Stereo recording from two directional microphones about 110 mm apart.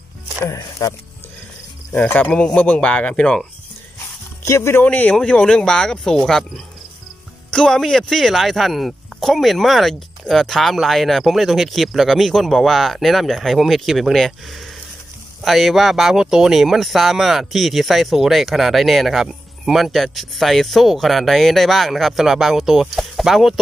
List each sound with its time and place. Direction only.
0.6 s speech: 30° left (ahead or behind)
2.0 s speech: 15° left (ahead or behind)
4.5 s speech: 25° left (ahead or behind)
4.8 s speech: 10° left (ahead or behind)